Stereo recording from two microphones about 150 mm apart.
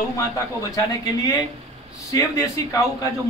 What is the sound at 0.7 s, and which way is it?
A man's voice, 25° left (ahead or behind).